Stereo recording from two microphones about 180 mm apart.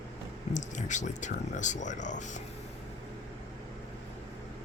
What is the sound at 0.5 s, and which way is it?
Speech, 45° left (ahead or behind).